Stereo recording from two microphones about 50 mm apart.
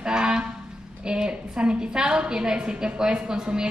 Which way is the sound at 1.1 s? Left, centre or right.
Centre.